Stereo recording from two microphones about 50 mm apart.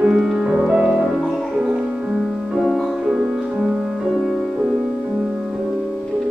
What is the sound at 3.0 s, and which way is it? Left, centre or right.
Music, centre.